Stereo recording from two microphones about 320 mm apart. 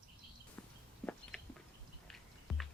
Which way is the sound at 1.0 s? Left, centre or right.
Centre.